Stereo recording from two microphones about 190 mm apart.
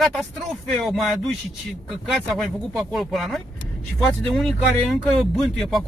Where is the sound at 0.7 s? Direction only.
Centre (ahead or behind).